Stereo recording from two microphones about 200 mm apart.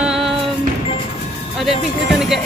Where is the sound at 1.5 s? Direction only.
Centre (ahead or behind).